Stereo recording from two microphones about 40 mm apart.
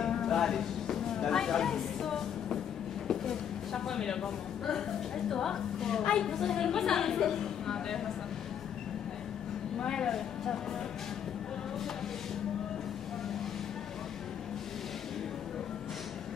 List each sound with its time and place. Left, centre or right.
0.0 s a sound: centre
5.3 s a woman's voice: centre
9.8 s speech: centre